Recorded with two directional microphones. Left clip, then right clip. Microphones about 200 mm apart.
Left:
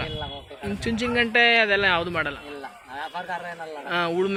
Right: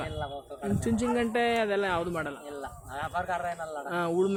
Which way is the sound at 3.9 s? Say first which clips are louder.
Left 7 dB; 10° right (ahead or behind).